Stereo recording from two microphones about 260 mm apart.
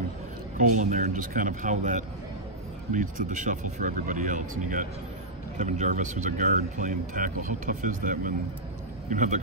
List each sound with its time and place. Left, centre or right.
0.6 s speech: right